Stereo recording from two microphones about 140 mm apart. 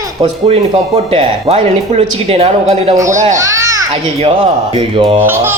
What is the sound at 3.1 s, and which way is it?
Speech, 60° right (ahead or behind).